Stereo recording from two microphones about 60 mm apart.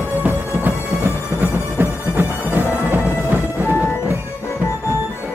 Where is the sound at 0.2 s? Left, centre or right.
Right.